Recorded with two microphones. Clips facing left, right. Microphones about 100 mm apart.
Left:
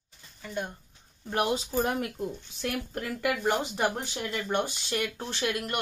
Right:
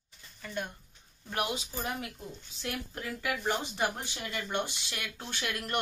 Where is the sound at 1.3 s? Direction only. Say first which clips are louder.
Left 7 dB; 35° left (ahead or behind).